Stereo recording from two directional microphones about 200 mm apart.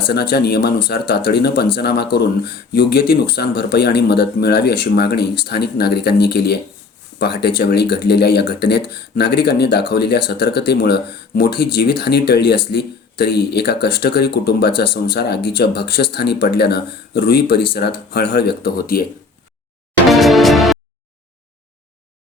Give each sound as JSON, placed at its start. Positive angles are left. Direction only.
{"t": 0.1, "sound": "speech", "side_deg": 55}
{"t": 20.1, "sound": "music", "side_deg": 0}